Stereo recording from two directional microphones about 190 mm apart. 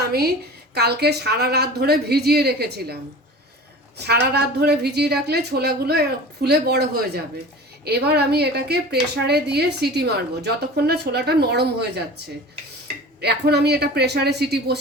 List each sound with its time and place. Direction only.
0.1 s a woman's voice: 55° right (ahead or behind)
13.2 s a woman's voice: 60° right (ahead or behind)